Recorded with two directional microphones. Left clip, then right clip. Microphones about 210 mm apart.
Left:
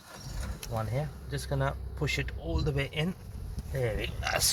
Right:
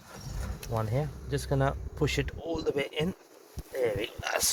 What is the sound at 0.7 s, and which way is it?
Speech, 50° right (ahead or behind).